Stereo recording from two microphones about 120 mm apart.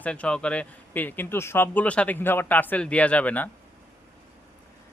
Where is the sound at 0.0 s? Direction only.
10° left (ahead or behind).